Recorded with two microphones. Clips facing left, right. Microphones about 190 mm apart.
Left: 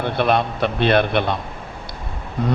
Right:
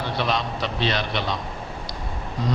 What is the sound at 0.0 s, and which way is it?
A man's voice, 55° left (ahead or behind).